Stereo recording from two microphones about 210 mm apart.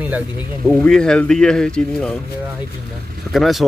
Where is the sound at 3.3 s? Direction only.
Centre (ahead or behind).